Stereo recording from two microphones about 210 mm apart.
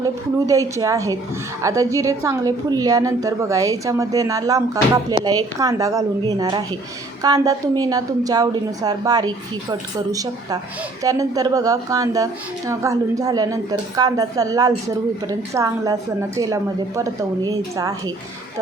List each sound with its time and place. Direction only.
0.0 s a woman's voice: 15° right (ahead or behind)